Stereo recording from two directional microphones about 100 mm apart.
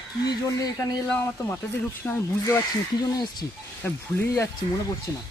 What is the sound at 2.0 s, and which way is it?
Speech, 15° left (ahead or behind).